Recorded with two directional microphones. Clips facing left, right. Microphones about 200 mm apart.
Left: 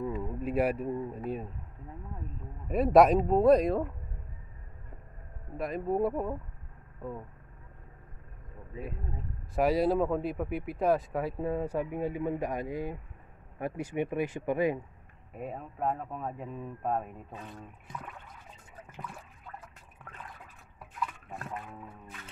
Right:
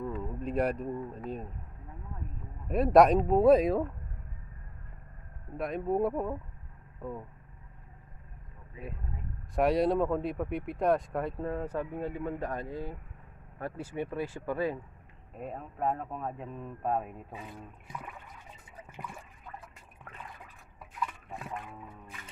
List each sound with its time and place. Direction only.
0.0 s speech: 5° left (ahead or behind)
2.7 s speech: centre (ahead or behind)
5.6 s speech: centre (ahead or behind)
9.6 s speech: centre (ahead or behind); by 14.8 s 15° left (ahead or behind)
15.3 s speech: 5° left (ahead or behind)
19.0 s toilet flush: 10° right (ahead or behind)
20.9 s music: centre (ahead or behind)